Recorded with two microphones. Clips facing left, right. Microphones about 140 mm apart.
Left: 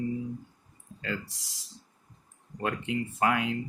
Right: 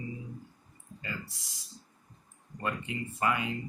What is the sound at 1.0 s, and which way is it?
Speech, 85° left.